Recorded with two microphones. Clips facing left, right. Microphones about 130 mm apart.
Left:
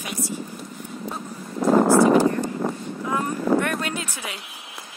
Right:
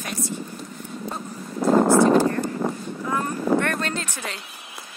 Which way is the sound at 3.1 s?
10° left (ahead or behind).